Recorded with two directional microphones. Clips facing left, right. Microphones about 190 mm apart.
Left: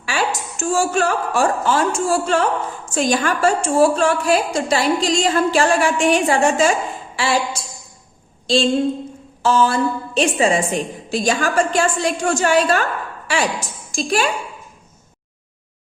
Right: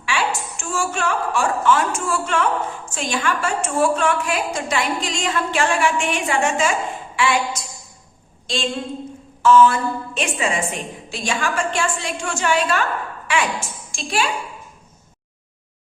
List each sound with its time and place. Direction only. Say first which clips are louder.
0.0 s a woman's voice: left 1 dB; 40° left (ahead or behind)